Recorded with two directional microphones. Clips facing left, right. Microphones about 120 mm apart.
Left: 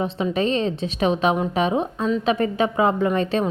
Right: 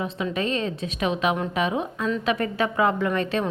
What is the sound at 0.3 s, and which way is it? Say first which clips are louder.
A woman's voice: left 5 dB; 25° left (ahead or behind).